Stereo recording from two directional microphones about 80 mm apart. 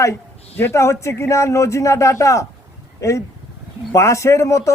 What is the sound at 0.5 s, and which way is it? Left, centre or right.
A man's voice, left.